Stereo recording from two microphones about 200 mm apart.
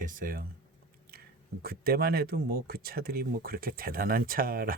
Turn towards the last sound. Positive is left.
turn(degrees=-45)  # may be behind; listen again after turning